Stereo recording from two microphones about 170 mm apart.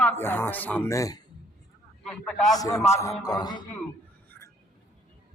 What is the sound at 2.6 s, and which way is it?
Music, 20° left (ahead or behind).